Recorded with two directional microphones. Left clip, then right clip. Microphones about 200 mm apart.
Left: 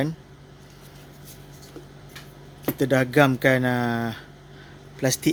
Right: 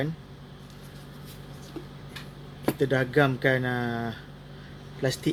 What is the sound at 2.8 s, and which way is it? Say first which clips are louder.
Speech: left 5 dB; 55° left (ahead or behind).